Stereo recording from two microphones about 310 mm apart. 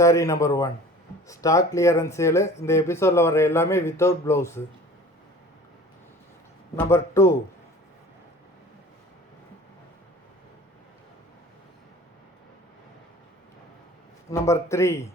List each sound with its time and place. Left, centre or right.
0.0 s speech: centre
6.7 s speech: centre
14.3 s speech: centre